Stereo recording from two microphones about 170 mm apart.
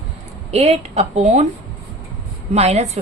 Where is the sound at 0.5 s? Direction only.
40° right (ahead or behind).